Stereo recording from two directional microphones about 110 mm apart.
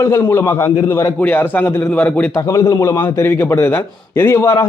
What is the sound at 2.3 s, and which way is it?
A man's voice, 30° left (ahead or behind).